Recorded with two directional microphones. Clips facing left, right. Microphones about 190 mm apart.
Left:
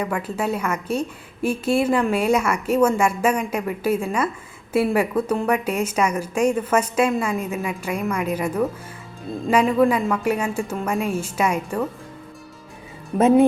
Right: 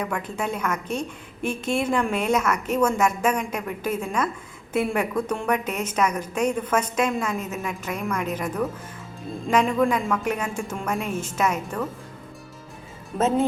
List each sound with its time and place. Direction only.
0.0 s a woman's voice: 5° left (ahead or behind)
13.1 s a woman's voice: 15° left (ahead or behind)